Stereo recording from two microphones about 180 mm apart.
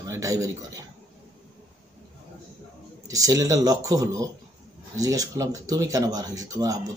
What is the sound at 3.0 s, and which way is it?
A man's voice, 20° right (ahead or behind).